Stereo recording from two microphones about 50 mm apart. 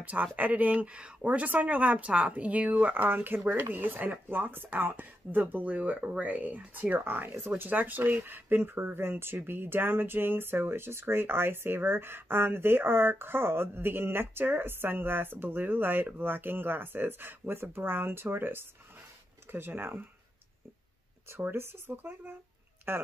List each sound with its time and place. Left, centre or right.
0.0 s speech: right
21.4 s speech: right